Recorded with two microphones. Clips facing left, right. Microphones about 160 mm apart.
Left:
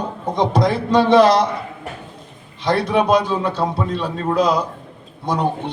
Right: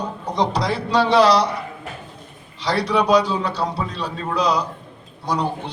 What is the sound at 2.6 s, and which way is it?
A man's voice, 50° left (ahead or behind).